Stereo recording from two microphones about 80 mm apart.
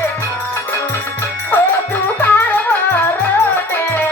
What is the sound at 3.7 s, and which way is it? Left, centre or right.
Music, left.